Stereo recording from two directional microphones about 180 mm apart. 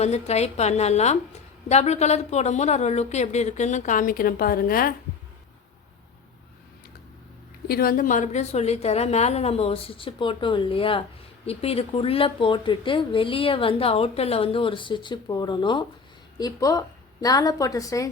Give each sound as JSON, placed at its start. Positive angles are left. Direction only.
{"t": 0.0, "sound": "a woman's voice", "side_deg": 35}
{"t": 7.7, "sound": "a woman's voice", "side_deg": 55}